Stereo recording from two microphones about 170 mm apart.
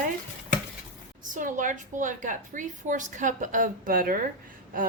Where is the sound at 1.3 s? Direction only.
50° right (ahead or behind).